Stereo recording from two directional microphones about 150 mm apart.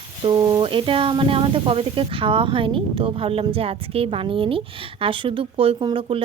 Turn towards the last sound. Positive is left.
turn(degrees=-40)  # may be behind; listen again after turning